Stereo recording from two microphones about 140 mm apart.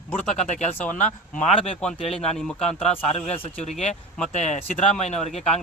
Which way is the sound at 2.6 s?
50° left (ahead or behind).